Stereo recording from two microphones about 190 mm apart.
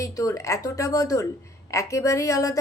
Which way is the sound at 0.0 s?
20° left (ahead or behind).